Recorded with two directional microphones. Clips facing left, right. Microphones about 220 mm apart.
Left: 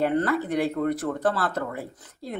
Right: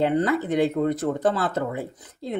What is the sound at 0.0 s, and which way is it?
Speech, 20° right (ahead or behind).